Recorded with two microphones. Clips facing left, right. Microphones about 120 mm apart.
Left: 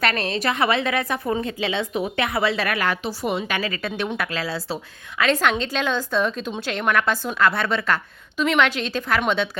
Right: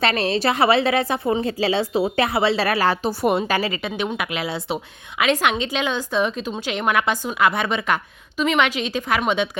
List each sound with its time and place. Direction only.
0.0 s a woman's voice: 30° right (ahead or behind)
3.8 s a woman's voice: 15° right (ahead or behind)